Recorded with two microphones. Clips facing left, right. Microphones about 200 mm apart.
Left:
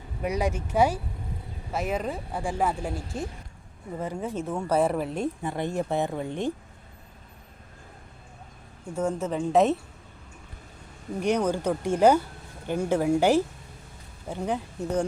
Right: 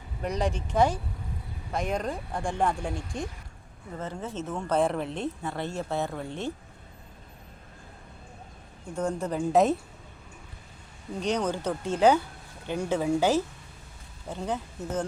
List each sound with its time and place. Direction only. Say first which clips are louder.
0.2 s speech: left 2 dB; 10° left (ahead or behind)
9.0 s speech: left 1 dB; 5° left (ahead or behind)
11.2 s speech: left 3 dB; 10° left (ahead or behind)